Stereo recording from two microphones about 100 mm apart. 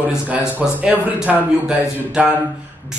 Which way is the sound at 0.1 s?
10° right (ahead or behind).